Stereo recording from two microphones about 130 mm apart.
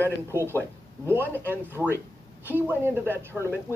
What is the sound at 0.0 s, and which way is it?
Speech, 20° right (ahead or behind).